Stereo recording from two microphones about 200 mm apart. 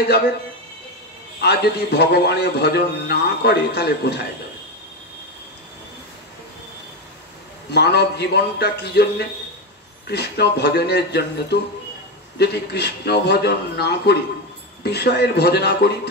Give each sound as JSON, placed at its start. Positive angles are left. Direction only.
{"t": 1.4, "sound": "a man's voice", "side_deg": 55}
{"t": 7.7, "sound": "a man's voice", "side_deg": 55}